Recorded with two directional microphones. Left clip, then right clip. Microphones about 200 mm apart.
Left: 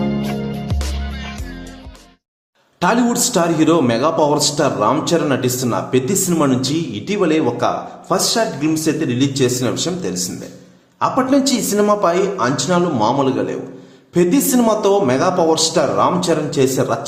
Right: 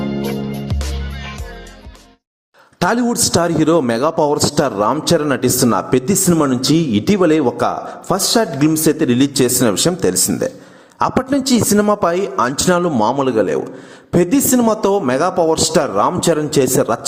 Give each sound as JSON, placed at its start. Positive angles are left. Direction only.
{"t": 0.7, "sound": "music", "side_deg": 0}
{"t": 2.7, "sound": "a man's voice", "side_deg": -40}